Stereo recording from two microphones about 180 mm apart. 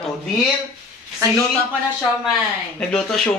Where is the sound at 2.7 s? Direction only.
5° left (ahead or behind).